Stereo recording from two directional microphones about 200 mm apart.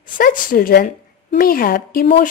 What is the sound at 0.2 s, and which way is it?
Speech, 45° left (ahead or behind).